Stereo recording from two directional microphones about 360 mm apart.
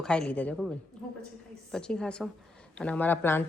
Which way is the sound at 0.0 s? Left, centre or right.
Centre.